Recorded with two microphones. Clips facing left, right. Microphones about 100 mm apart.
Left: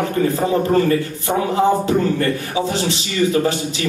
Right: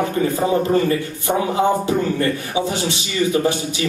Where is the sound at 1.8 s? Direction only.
20° right (ahead or behind).